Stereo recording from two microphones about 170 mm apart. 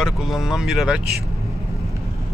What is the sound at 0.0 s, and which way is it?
Speech, 5° right (ahead or behind).